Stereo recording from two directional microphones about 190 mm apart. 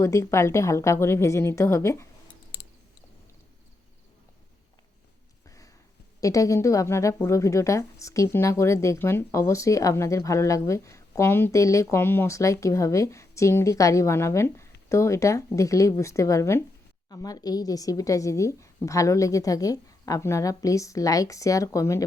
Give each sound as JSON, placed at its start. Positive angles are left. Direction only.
{"t": 0.0, "sound": "a woman's voice", "side_deg": 15}
{"t": 5.5, "sound": "a sound", "side_deg": 15}
{"t": 6.1, "sound": "a woman's voice", "side_deg": 15}